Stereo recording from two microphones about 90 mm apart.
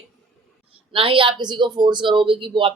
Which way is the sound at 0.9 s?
80° right.